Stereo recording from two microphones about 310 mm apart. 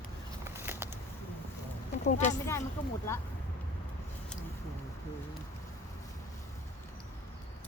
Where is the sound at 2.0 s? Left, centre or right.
Left.